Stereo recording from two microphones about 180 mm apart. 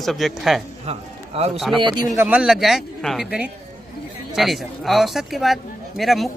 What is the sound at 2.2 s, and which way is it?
A woman's voice, 10° right (ahead or behind).